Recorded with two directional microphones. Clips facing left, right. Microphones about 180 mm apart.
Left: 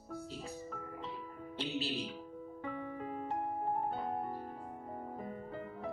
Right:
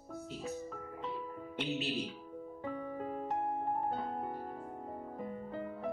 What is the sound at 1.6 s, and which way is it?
Speech, 35° left (ahead or behind).